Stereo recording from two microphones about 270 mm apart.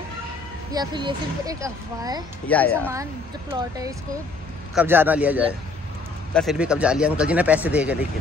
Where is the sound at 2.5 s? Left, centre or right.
Centre.